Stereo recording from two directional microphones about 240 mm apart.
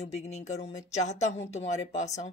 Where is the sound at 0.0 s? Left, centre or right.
Left.